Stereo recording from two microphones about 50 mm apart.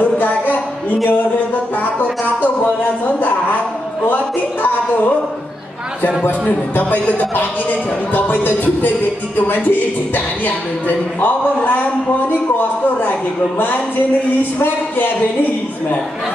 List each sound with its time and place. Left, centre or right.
0.0 s a sound: left
1.8 s speech: left
6.4 s speech: left